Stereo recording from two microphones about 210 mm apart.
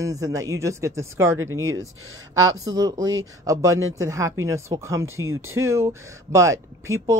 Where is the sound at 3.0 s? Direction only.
70° right (ahead or behind).